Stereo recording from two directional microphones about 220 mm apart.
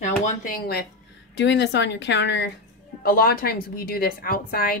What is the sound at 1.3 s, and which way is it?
A woman's voice, 55° left (ahead or behind).